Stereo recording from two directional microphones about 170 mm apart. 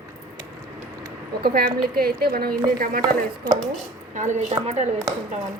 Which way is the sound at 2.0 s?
65° right (ahead or behind).